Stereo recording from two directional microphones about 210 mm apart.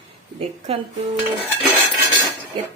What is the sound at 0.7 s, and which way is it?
Speech, 30° right (ahead or behind).